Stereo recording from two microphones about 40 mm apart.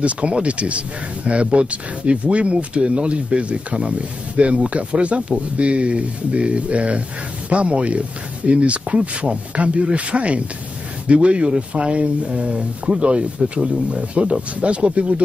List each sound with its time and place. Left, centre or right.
0.0 s speech: right